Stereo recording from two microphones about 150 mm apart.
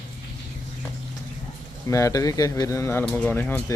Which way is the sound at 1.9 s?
20° left (ahead or behind).